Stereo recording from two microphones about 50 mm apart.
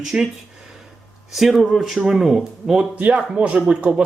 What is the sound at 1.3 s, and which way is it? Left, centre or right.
Speech, centre.